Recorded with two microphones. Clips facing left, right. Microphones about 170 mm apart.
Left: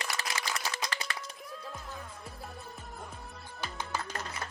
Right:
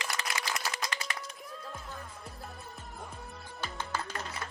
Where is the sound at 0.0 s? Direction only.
35° left (ahead or behind).